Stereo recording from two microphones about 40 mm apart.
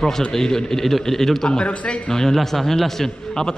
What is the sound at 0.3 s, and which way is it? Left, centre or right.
A man's voice, centre.